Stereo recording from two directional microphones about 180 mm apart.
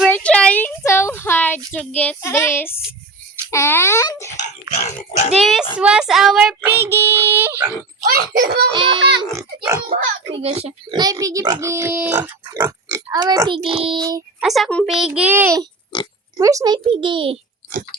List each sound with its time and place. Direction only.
0.1 s a sound: 5° left (ahead or behind)
2.0 s speech: 10° left (ahead or behind)
5.4 s a child's voice: centre (ahead or behind)
5.7 s child singing: 5° right (ahead or behind)
8.1 s a child's voice: 55° right (ahead or behind)
8.9 s speech: 75° right (ahead or behind)
9.3 s child singing: 15° right (ahead or behind)
10.3 s speech: 35° right (ahead or behind)
11.0 s child singing: 20° right (ahead or behind)
12.5 s speech: 20° right (ahead or behind)
14.4 s a child's voice: centre (ahead or behind)
15.9 s speech: 25° left (ahead or behind)
16.4 s speech: 20° right (ahead or behind)